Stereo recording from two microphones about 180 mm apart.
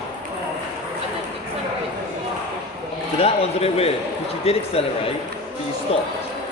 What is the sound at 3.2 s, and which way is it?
A man's voice, 35° left (ahead or behind).